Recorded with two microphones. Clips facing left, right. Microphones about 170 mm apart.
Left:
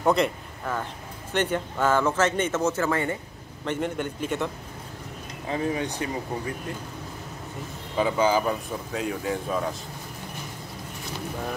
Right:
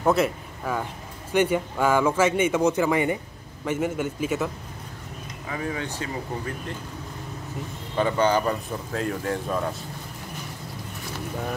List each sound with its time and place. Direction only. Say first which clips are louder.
0.0 s a man's voice: right 1 dB; 5° right (ahead or behind)
5.5 s speech: left 3 dB; 25° left (ahead or behind)
7.9 s speech: right 1 dB; 5° left (ahead or behind)